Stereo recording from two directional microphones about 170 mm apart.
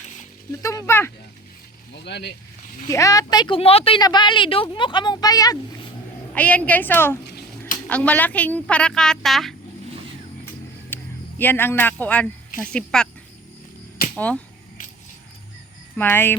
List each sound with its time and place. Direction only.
0.6 s a woman's voice: 20° left (ahead or behind)
2.0 s speech: 80° left
2.8 s a woman's voice: 20° left (ahead or behind)
6.3 s a woman's voice: 10° left (ahead or behind)
10.8 s speech: 10° left (ahead or behind)
14.2 s a woman's voice: 10° left (ahead or behind)
16.0 s a woman's voice: 10° left (ahead or behind)